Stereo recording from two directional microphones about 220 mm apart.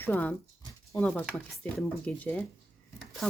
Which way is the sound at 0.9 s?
10° left (ahead or behind).